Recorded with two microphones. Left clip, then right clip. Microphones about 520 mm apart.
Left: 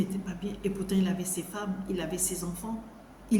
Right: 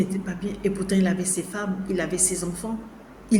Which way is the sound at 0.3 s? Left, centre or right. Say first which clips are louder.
Right 7 dB; left.